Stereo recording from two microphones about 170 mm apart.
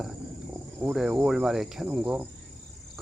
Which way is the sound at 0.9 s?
5° right (ahead or behind).